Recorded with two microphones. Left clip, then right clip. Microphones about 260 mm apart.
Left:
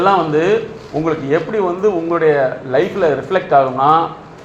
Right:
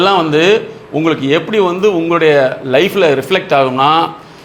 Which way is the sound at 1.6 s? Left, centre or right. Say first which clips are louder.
Right 4 dB; right.